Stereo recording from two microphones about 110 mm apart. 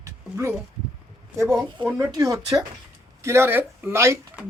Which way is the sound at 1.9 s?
25° right (ahead or behind).